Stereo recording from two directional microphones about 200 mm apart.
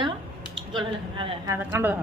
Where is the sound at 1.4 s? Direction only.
10° right (ahead or behind).